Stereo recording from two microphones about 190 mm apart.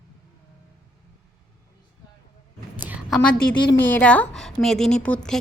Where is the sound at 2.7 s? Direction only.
10° right (ahead or behind).